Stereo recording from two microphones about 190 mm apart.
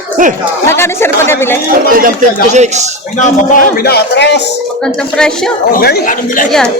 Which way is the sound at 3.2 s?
50° left (ahead or behind).